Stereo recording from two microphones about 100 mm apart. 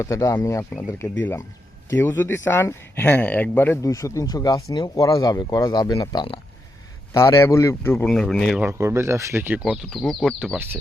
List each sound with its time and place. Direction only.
0.0 s speech: 30° left (ahead or behind)
3.8 s speech: 35° left (ahead or behind)
8.0 s speech: 5° left (ahead or behind)
8.8 s speech: 30° right (ahead or behind)
9.6 s speech: centre (ahead or behind)